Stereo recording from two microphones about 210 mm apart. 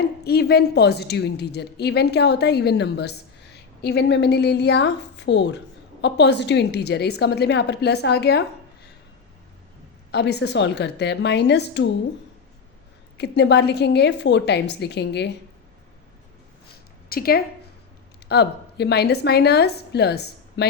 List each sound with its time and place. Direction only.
0.3 s a woman's voice: 50° left (ahead or behind)
10.1 s a woman's voice: 55° left (ahead or behind)
13.1 s a woman's voice: 55° left (ahead or behind)
17.1 s a woman's voice: 45° left (ahead or behind)